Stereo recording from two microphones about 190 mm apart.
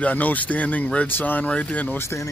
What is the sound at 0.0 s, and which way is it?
Speech, 10° left (ahead or behind).